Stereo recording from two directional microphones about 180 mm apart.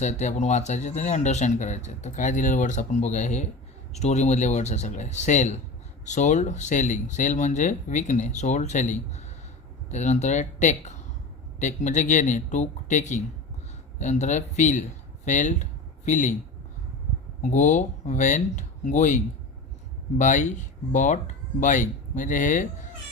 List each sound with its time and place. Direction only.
0.0 s speech: 40° left (ahead or behind)
17.4 s speech: 40° left (ahead or behind)